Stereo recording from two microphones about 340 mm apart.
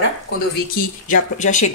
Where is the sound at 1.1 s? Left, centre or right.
Left.